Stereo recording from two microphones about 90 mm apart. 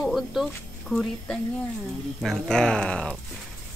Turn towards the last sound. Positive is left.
turn(degrees=10)  # may be behind; listen again after turning